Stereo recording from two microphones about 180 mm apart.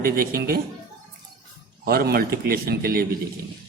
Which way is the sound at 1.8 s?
60° right (ahead or behind).